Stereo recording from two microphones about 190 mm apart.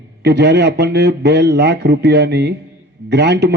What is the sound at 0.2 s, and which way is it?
Speech, 60° right (ahead or behind).